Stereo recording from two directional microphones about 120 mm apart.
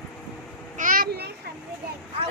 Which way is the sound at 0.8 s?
90° right.